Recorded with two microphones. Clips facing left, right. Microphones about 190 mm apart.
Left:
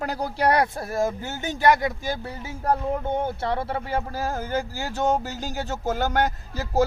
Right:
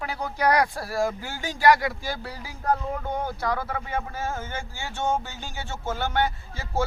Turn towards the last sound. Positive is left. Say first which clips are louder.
# left 6 dB
turn(degrees=40)  # may be behind; listen again after turning